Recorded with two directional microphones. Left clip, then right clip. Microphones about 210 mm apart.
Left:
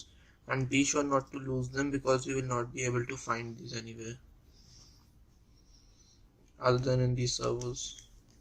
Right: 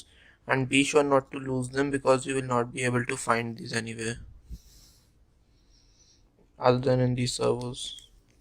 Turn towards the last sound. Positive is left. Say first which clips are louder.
# right 6 dB
turn(degrees=-45)  # may be behind; listen again after turning